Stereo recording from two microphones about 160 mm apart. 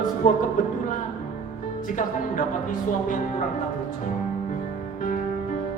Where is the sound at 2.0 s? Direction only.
55° left (ahead or behind).